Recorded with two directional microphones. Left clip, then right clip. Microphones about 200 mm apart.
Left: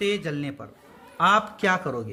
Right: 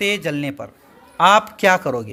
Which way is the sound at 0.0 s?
35° right (ahead or behind).